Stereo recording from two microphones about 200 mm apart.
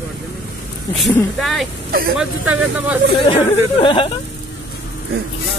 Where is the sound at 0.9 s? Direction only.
Centre (ahead or behind).